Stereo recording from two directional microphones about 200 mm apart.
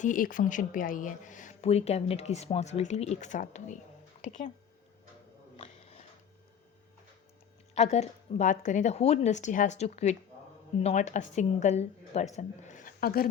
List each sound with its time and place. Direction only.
0.0 s speech: 40° left (ahead or behind)
5.5 s music: 30° left (ahead or behind)
7.8 s a woman's voice: 35° left (ahead or behind); by 13.2 s 50° left (ahead or behind)